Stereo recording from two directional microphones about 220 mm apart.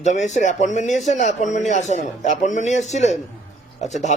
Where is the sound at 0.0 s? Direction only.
35° left (ahead or behind).